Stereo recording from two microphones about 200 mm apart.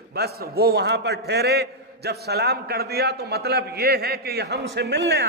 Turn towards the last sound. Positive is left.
turn(degrees=-60)  # may be behind; listen again after turning